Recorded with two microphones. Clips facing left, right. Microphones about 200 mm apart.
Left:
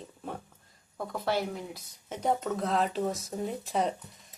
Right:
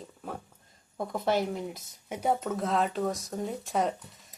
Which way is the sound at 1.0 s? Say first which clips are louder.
Right 3 dB; 20° right (ahead or behind).